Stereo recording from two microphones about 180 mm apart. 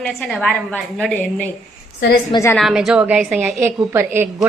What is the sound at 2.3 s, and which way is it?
Speech, 15° left (ahead or behind).